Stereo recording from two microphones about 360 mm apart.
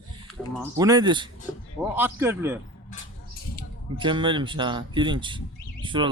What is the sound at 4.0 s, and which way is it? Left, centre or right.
Speech, centre.